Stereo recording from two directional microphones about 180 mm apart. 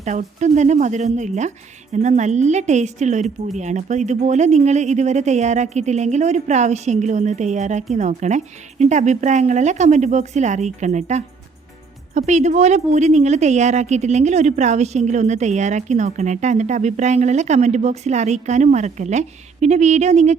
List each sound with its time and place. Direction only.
0.0 s a woman's voice: 40° right (ahead or behind)